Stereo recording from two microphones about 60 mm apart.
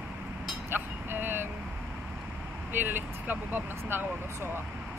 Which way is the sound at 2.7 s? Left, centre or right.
Right.